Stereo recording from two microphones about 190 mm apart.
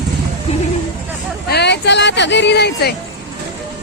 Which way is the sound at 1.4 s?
60° left (ahead or behind).